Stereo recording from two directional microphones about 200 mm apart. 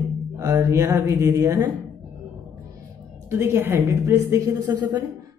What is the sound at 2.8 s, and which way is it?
A woman's voice, 15° right (ahead or behind).